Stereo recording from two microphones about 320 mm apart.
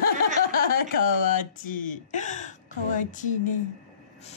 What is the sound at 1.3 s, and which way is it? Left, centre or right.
Speech, left.